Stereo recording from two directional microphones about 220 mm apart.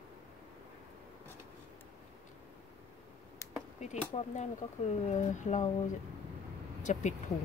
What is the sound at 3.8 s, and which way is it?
Speech, 30° left (ahead or behind).